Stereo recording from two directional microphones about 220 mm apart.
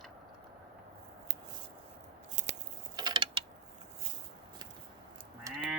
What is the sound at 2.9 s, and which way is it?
Mechanisms, 20° right (ahead or behind).